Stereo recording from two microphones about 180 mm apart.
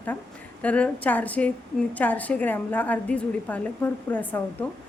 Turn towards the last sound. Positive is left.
turn(degrees=10)  # may be behind; listen again after turning